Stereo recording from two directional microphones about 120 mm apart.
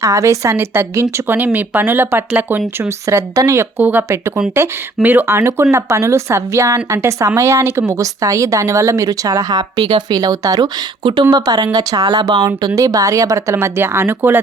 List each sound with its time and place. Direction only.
0.0 s a woman's voice: 25° right (ahead or behind)
11.0 s a woman's voice: 45° right (ahead or behind); by 14.3 s 20° right (ahead or behind)